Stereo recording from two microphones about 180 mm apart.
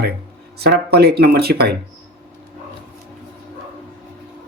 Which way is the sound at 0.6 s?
65° right (ahead or behind).